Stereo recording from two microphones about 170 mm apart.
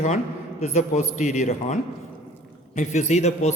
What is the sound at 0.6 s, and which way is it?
A man's voice, 40° left (ahead or behind).